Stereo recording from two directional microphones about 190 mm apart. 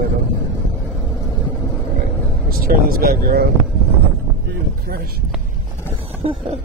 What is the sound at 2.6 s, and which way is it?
Speech, 50° right (ahead or behind).